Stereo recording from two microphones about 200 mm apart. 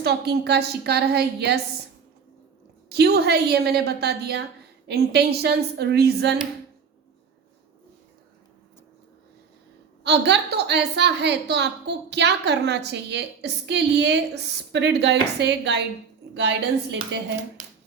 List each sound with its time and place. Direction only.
0.0 s a woman's voice: 55° right (ahead or behind)
2.9 s a woman's voice: 55° right (ahead or behind)
10.0 s a woman's voice: 60° right (ahead or behind)